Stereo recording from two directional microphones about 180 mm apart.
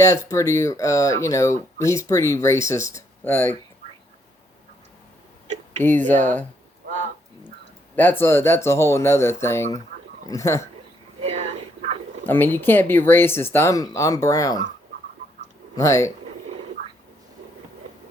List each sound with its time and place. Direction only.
0.3 s speech: 15° left (ahead or behind)
5.8 s speech: 10° left (ahead or behind)
7.9 s speech: 10° left (ahead or behind)
11.2 s a sound: 35° right (ahead or behind)
12.2 s speech: 10° left (ahead or behind)
15.7 s speech: 15° left (ahead or behind)